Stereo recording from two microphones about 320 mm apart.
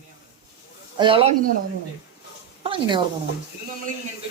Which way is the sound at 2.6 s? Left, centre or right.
Centre.